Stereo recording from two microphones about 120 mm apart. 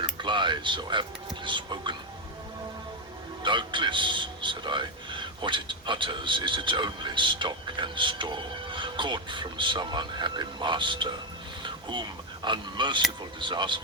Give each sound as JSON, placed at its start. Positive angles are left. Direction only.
{"t": 0.0, "sound": "mechanisms", "side_deg": -40}
{"t": 1.5, "sound": "a man's voice", "side_deg": -40}
{"t": 3.4, "sound": "a man's voice", "side_deg": -40}
{"t": 11.6, "sound": "a sound", "side_deg": -40}
{"t": 12.5, "sound": "a man's voice", "side_deg": -40}